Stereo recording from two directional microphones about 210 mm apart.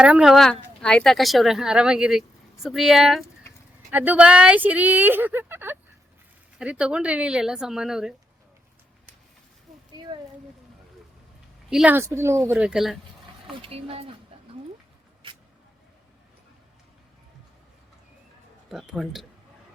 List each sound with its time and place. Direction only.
0.0 s speech: 5° right (ahead or behind)
11.7 s speech: 5° right (ahead or behind)
13.5 s speech: 25° right (ahead or behind)
18.7 s speech: centre (ahead or behind)